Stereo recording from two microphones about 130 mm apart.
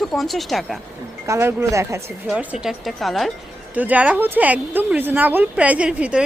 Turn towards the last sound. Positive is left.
turn(degrees=-10)  # may be behind; listen again after turning